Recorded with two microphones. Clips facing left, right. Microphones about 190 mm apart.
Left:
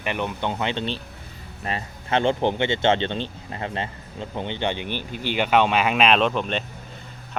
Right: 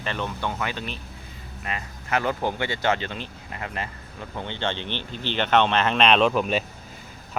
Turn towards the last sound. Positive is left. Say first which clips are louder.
# right 1 dB
turn(degrees=-5)  # may be behind; listen again after turning